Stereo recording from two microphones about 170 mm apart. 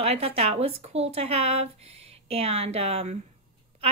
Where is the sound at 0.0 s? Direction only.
35° right (ahead or behind).